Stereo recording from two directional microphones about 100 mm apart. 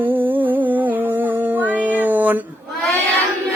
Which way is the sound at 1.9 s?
15° right (ahead or behind).